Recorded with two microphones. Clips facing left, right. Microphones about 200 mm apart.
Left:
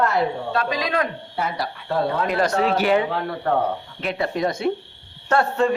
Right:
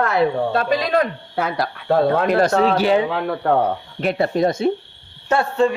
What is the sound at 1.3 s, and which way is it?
Speech, 90° right.